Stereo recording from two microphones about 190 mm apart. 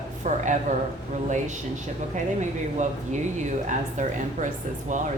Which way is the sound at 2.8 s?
40° right (ahead or behind).